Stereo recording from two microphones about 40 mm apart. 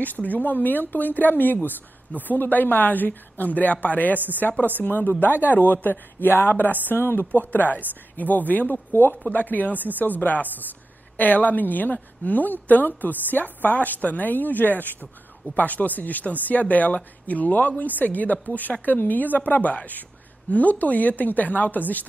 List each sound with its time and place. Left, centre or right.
0.0 s speech: left
4.8 s speech: left
9.1 s speech: left